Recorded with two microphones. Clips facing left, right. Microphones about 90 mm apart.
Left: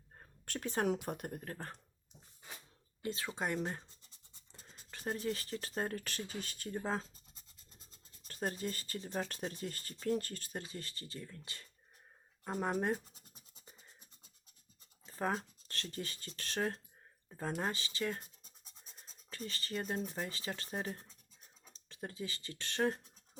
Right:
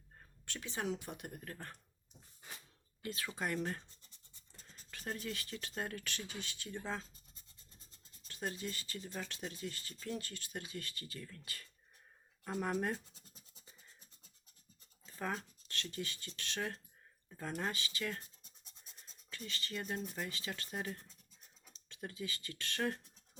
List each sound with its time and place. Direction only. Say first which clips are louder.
0.2 s a sound: left 6 dB; 45° left (ahead or behind)
1.0 s speech: left 5 dB; 45° left (ahead or behind)
3.0 s speech: left 2 dB; 30° left (ahead or behind)
4.5 s scratch: left 2 dB; 20° left (ahead or behind)
4.9 s speech: left 5 dB; 30° left (ahead or behind)
8.3 s speech: left 3 dB; 40° left (ahead or behind)
15.0 s speech: left 4 dB; 35° left (ahead or behind)
19.3 s speech: left 3 dB; 35° left (ahead or behind)